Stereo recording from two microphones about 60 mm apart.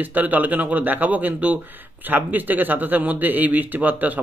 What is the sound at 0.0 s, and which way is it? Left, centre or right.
Speech, right.